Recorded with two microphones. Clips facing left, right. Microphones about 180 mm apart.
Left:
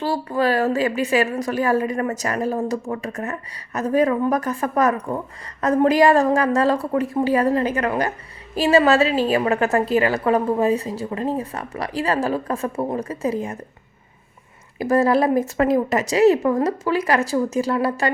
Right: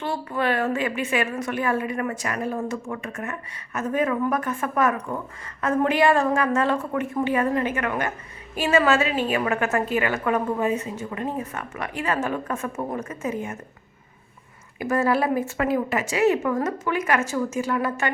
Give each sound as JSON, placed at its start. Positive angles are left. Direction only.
{"t": 0.0, "sound": "a woman's voice", "side_deg": 35}
{"t": 14.8, "sound": "a woman's voice", "side_deg": 35}